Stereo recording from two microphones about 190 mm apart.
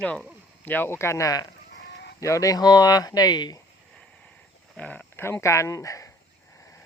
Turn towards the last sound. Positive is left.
turn(degrees=15)  # may be behind; listen again after turning